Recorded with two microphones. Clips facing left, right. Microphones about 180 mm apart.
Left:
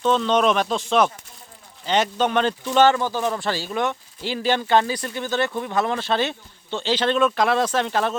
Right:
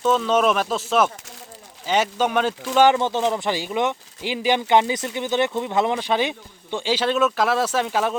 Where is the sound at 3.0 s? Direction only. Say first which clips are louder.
Right 2 dB; 25° right (ahead or behind).